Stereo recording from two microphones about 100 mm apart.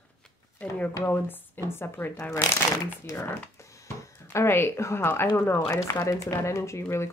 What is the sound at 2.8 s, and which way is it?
Speech, 35° left (ahead or behind).